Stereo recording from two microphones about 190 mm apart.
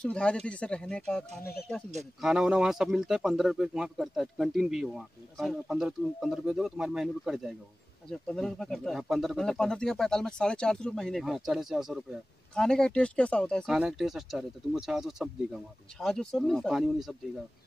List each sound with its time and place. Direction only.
0.0 s speech: 5° left (ahead or behind)
1.4 s speech: 55° left (ahead or behind)
2.2 s speech: 5° right (ahead or behind)